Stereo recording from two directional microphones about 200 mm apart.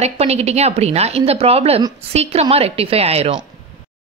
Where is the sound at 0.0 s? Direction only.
30° right (ahead or behind).